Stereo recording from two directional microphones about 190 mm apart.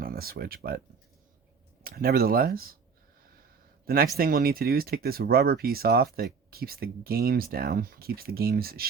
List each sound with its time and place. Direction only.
0.0 s speech: 55° right (ahead or behind)
1.8 s speech: 50° right (ahead or behind)
3.8 s speech: 55° right (ahead or behind)